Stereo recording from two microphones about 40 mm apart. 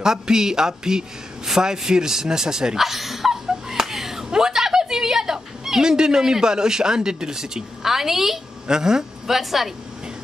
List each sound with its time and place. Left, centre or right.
0.0 s a man's voice: centre
9.3 s speech: centre